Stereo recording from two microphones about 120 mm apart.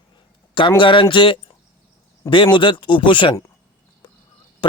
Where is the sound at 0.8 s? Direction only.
45° left (ahead or behind).